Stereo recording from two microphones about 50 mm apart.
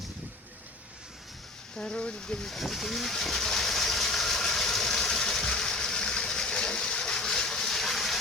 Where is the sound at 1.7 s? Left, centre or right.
Centre.